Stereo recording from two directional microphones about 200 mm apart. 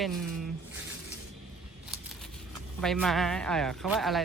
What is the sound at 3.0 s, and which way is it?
Speech, centre (ahead or behind).